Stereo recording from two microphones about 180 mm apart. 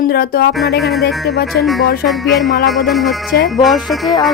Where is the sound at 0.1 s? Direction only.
60° left (ahead or behind).